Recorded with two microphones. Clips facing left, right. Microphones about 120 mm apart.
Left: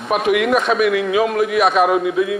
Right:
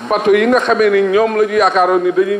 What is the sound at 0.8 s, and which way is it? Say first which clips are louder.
A man's voice: right 5 dB; 45° right (ahead or behind).